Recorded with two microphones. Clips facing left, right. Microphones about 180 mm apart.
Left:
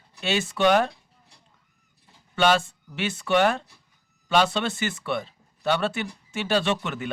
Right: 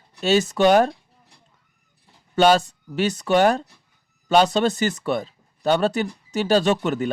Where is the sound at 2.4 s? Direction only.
40° right (ahead or behind).